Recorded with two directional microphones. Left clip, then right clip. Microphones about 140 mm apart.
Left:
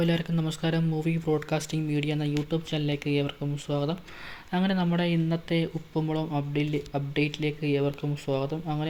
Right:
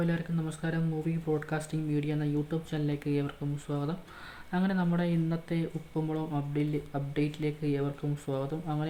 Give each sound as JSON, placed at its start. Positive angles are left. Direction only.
{"t": 0.0, "sound": "speech", "side_deg": 35}